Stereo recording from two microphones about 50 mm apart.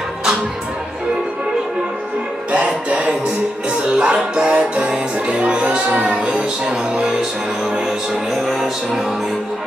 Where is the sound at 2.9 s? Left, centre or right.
Right; by 9.1 s centre.